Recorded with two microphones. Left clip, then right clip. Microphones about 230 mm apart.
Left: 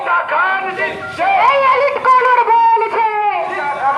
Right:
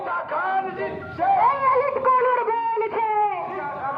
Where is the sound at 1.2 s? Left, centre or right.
Left.